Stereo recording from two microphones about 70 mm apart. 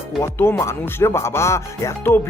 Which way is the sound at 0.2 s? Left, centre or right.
Left.